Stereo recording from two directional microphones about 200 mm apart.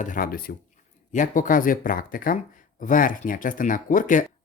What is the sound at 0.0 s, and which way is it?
Speech, 45° left (ahead or behind).